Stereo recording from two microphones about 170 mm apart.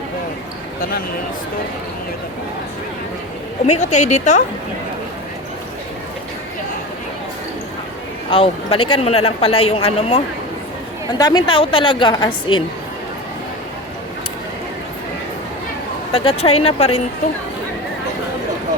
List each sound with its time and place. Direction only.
3.8 s a woman's voice: 45° left (ahead or behind)
8.3 s a man's voice: 30° left (ahead or behind)
11.2 s a woman's voice: 25° left (ahead or behind)
16.1 s a man's voice: 35° left (ahead or behind)